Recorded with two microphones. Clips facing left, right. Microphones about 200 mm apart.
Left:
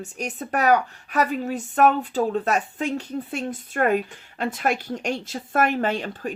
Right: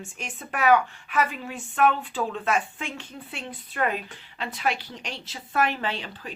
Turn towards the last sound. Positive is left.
turn(degrees=45)  # may be behind; listen again after turning